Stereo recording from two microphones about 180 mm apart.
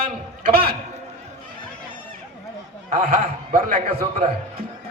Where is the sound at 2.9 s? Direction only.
50° right (ahead or behind).